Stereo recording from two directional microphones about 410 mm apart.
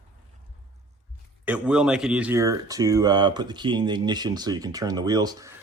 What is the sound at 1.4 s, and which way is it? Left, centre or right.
Speech, centre.